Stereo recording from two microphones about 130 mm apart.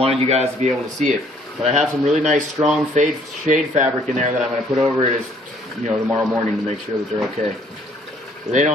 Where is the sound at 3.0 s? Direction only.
65° right (ahead or behind).